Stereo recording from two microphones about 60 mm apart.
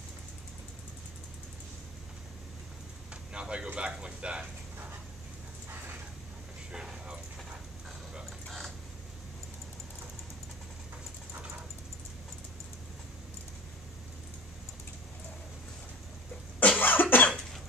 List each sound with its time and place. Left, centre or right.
3.3 s speech: centre
6.7 s a sound: centre
8.3 s mechanisms: centre
16.5 s cough: left